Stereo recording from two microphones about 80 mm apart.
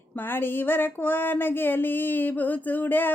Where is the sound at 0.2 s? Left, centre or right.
Left.